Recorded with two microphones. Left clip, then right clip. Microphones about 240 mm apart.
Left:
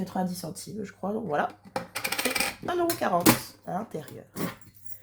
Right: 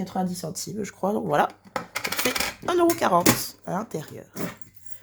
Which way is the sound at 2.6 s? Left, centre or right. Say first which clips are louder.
Right 9 dB; right.